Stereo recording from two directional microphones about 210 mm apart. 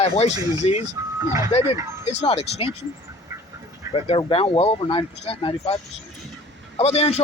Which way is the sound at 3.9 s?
25° left (ahead or behind).